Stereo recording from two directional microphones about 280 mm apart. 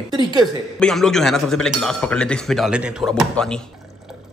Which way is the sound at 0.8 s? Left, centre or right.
Centre.